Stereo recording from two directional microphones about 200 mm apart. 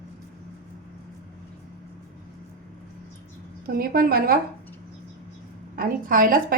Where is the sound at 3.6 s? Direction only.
45° right (ahead or behind).